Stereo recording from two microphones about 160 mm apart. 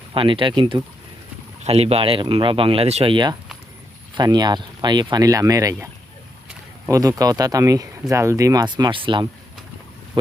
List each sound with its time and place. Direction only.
0.1 s speech: 35° right (ahead or behind)